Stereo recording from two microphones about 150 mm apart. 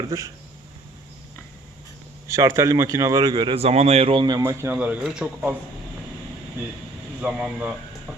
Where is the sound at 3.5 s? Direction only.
45° right (ahead or behind).